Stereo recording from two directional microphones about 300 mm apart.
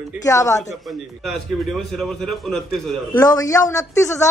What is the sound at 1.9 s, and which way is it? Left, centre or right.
Speech, centre.